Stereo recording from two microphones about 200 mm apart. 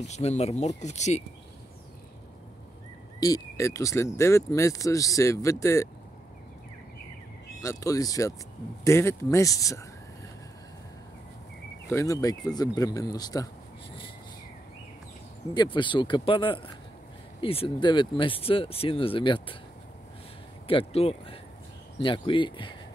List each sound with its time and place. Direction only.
0.0 s speech: 35° left (ahead or behind)
3.2 s speech: 15° left (ahead or behind)
7.6 s speech: 15° left (ahead or behind)
11.9 s speech: 15° left (ahead or behind)
15.5 s speech: 20° left (ahead or behind)
20.6 s speech: 30° left (ahead or behind)